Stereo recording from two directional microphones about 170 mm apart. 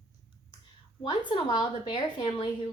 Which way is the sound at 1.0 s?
25° left (ahead or behind).